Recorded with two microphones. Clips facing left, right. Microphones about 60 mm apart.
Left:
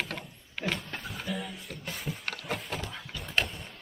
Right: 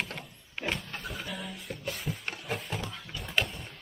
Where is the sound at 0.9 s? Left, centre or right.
Centre.